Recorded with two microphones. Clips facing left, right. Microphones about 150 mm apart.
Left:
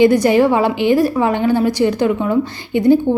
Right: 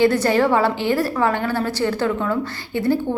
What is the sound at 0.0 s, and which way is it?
A woman's voice, 15° left (ahead or behind).